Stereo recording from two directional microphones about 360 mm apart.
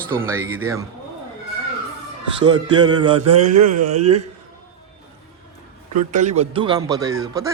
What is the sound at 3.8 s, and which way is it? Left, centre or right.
Speech, centre.